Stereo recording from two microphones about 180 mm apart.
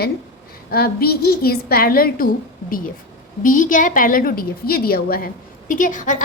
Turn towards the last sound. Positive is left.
turn(degrees=45)  # may be behind; listen again after turning